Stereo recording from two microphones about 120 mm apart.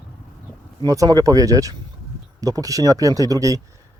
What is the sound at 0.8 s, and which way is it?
Speech, 30° right (ahead or behind).